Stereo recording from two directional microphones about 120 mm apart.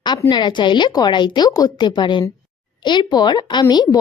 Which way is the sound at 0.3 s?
40° left (ahead or behind).